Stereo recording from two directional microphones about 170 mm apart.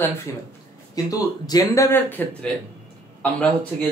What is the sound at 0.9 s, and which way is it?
Speech, 20° left (ahead or behind).